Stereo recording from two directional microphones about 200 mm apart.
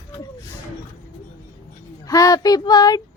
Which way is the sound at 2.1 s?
15° left (ahead or behind).